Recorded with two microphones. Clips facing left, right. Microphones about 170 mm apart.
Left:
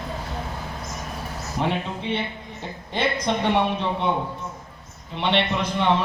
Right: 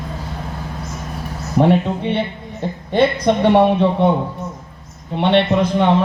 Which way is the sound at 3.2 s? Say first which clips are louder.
Right 8 dB; 60° right (ahead or behind).